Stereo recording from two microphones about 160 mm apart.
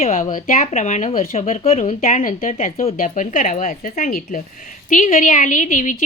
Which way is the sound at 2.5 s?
40° left (ahead or behind).